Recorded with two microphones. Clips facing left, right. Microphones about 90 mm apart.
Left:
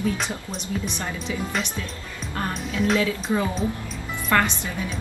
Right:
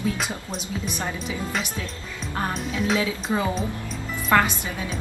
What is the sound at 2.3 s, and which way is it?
Speech, 5° right (ahead or behind).